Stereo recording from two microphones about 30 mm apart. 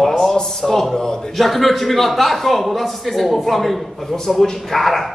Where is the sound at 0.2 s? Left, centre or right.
Centre.